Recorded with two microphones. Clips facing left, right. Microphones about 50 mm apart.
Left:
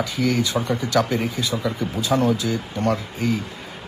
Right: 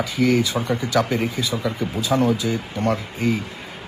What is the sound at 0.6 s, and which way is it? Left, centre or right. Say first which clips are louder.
Speech: even; right.